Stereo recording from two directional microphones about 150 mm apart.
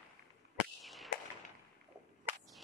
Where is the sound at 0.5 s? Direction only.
Centre (ahead or behind).